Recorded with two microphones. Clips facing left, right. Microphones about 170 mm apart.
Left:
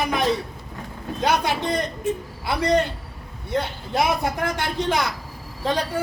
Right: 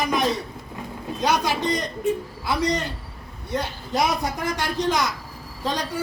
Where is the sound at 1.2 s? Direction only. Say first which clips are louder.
Even; 55° left (ahead or behind).